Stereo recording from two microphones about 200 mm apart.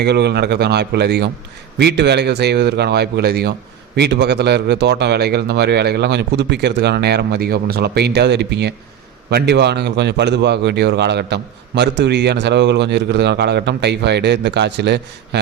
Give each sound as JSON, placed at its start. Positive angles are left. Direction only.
{"t": 0.0, "sound": "speech", "side_deg": -55}